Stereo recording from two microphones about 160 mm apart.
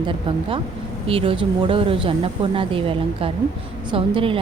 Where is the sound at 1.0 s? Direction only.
35° right (ahead or behind).